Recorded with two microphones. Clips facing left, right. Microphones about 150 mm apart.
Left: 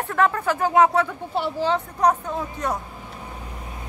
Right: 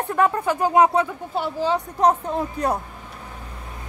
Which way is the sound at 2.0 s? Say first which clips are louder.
Right 3 dB; 30° right (ahead or behind).